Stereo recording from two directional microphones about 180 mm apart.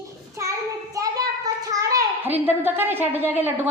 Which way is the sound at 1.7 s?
20° right (ahead or behind).